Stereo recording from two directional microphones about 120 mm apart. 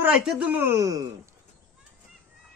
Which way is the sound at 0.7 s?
30° right (ahead or behind).